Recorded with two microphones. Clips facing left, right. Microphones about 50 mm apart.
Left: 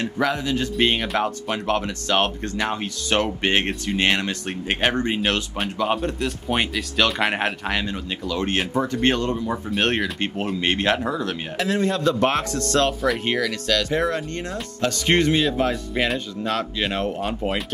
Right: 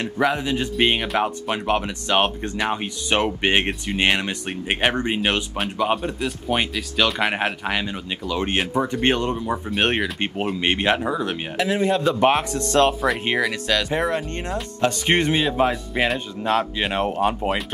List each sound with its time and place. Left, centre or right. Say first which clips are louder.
0.0 s speech: right 1 dB; right
17.4 s speech: right 1 dB; centre